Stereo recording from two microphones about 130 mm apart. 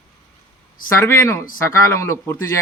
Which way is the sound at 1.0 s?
20° left (ahead or behind).